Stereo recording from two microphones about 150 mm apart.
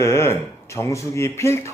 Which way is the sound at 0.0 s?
15° left (ahead or behind).